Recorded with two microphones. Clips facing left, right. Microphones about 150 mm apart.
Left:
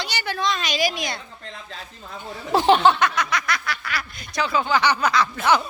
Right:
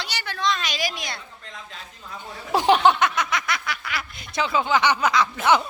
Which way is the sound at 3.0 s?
20° right (ahead or behind).